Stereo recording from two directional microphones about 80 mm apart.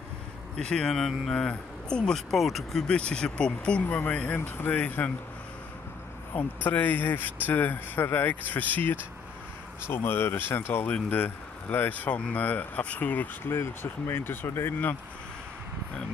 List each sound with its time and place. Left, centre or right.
0.6 s speech: centre
2.9 s speech: centre
3.8 s speech: left
6.3 s speech: left